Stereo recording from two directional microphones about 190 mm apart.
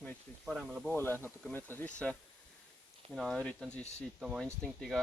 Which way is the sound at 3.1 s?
Centre (ahead or behind).